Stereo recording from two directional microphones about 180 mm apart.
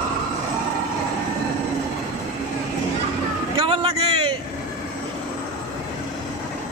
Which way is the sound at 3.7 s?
30° right (ahead or behind).